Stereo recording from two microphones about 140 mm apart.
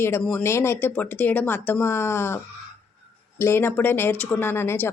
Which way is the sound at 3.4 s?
15° left (ahead or behind).